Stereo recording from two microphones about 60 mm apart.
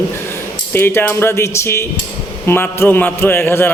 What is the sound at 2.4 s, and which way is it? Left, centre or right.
Speech, left.